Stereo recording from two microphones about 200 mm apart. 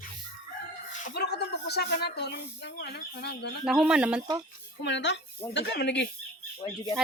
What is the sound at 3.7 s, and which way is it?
Speech, 5° right (ahead or behind).